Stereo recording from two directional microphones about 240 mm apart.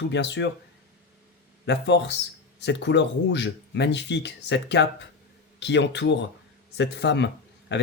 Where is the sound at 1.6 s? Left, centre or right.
Left.